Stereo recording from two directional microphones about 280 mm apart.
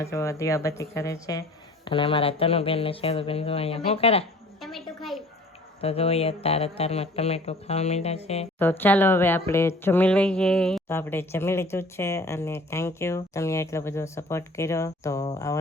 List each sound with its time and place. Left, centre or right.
0.0 s speech: centre
5.8 s speech: left
8.5 s speech: centre